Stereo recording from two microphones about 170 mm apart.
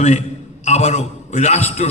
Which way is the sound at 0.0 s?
45° left (ahead or behind).